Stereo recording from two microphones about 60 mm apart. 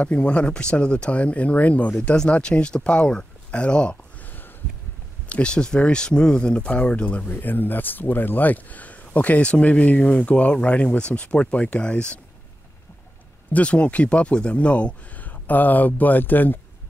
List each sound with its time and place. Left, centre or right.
0.0 s speech: left
5.3 s speech: centre
7.3 s speech: left
13.5 s speech: left